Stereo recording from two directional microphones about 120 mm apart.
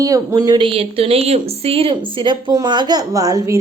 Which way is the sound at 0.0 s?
30° right (ahead or behind).